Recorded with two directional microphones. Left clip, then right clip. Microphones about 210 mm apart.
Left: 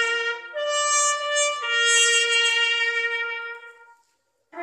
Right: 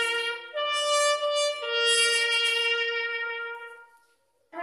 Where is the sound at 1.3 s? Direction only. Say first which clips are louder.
Left 4 dB; 25° left (ahead or behind); by 3.5 s 50° left (ahead or behind).